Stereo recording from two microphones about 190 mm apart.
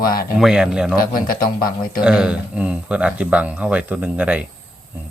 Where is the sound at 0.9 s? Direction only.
50° left (ahead or behind).